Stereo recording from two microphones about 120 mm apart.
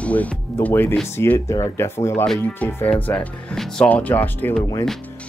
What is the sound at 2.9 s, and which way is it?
Speech, 15° left (ahead or behind).